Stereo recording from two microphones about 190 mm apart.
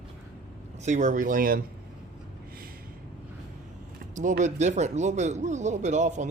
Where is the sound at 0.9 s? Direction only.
40° right (ahead or behind).